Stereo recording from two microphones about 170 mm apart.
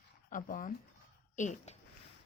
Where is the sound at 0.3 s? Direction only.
50° left (ahead or behind).